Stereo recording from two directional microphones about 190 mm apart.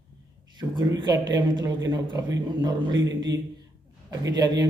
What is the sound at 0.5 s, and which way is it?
A man's voice, 25° right (ahead or behind).